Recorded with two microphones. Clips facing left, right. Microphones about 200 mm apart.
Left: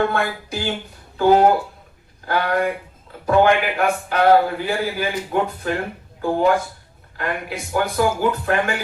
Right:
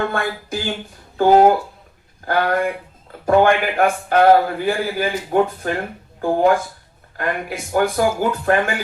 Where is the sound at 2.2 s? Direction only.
50° right (ahead or behind).